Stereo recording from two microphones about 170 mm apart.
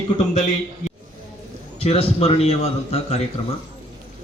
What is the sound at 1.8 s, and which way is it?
A man's voice, 35° left (ahead or behind).